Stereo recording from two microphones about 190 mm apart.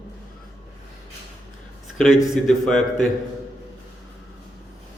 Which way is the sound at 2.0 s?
Centre (ahead or behind).